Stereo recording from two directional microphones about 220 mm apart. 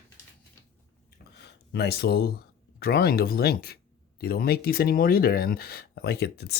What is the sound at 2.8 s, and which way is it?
Speech, 45° left (ahead or behind).